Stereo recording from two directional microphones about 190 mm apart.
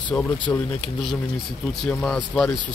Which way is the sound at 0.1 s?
5° left (ahead or behind).